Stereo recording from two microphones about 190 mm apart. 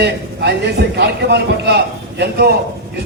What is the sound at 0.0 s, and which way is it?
A man's voice, 60° right (ahead or behind).